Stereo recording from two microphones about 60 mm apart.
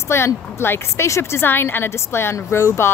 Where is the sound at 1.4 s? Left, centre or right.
Left.